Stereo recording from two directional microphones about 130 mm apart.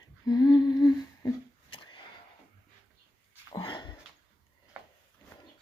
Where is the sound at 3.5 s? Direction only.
35° left (ahead or behind).